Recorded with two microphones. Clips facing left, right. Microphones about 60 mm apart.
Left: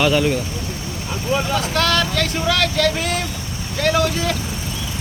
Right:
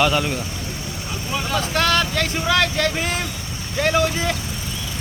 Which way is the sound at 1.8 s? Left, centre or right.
Right.